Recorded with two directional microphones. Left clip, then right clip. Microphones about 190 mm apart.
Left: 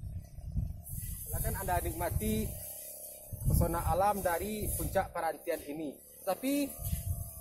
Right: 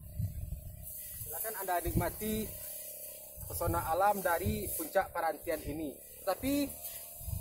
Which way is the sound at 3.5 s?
Centre (ahead or behind).